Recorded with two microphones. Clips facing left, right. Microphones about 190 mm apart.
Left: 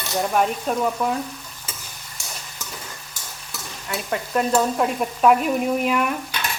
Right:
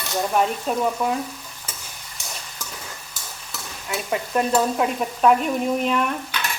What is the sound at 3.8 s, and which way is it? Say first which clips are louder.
A woman's voice: right 1 dB; 5° right (ahead or behind).